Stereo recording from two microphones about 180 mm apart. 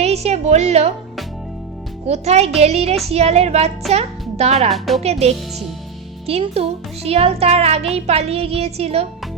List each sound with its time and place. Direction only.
0.0 s a woman's voice: 35° right (ahead or behind)
2.0 s a child's voice: 35° right (ahead or behind)